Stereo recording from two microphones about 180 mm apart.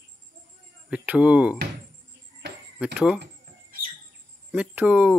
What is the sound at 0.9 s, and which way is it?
Speech, 5° right (ahead or behind).